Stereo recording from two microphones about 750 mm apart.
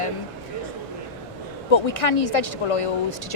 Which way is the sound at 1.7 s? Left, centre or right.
Left.